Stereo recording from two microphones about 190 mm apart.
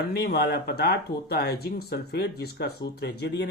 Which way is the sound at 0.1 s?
55° left (ahead or behind).